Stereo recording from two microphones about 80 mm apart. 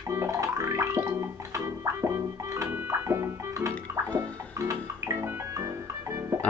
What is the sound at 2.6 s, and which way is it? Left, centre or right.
Music, right.